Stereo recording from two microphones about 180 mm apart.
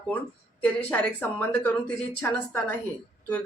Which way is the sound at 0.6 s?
10° left (ahead or behind).